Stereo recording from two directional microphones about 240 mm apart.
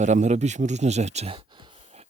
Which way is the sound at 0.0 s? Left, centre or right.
Right.